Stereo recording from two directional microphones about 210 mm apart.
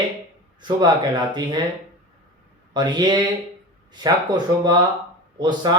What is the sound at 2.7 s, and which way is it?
Speech, 20° right (ahead or behind).